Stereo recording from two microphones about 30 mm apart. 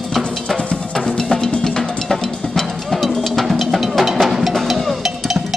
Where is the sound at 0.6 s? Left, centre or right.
Left.